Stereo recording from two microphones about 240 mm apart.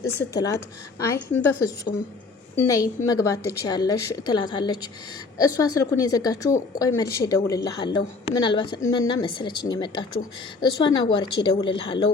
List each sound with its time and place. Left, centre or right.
0.0 s a woman's voice: centre